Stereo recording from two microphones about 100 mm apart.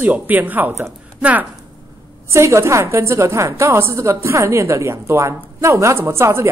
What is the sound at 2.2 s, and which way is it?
A woman's voice, 30° right (ahead or behind).